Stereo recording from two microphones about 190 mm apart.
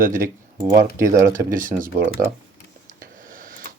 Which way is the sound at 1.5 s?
45° right (ahead or behind).